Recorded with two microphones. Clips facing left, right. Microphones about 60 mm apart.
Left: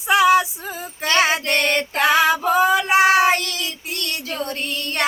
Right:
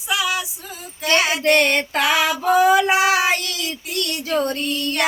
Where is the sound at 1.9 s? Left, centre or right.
Left.